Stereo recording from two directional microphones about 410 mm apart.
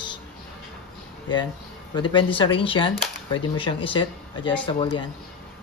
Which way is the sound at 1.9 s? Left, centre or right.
Centre.